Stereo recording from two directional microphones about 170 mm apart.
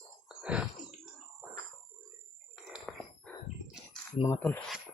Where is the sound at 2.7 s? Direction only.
Centre (ahead or behind).